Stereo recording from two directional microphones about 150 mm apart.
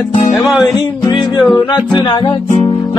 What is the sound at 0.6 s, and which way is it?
Music, 30° left (ahead or behind).